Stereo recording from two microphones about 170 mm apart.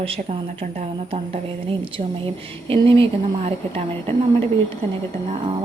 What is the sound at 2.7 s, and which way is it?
A woman's voice, 35° right (ahead or behind).